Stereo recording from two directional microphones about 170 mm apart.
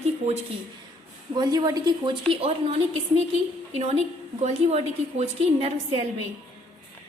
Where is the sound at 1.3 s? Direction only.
25° right (ahead or behind).